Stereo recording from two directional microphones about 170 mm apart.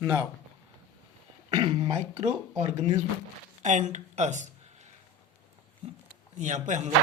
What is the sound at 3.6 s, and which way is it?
A woman's voice, 45° right (ahead or behind).